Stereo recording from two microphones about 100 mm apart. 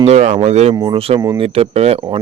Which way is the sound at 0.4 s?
90° right.